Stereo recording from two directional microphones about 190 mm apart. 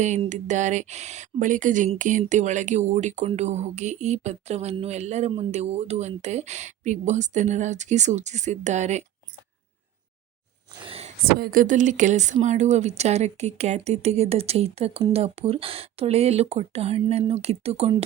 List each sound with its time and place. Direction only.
0.0 s speech: 40° right (ahead or behind)
10.8 s a sound: 30° right (ahead or behind)
11.3 s speech: 50° right (ahead or behind); by 17.9 s 35° right (ahead or behind)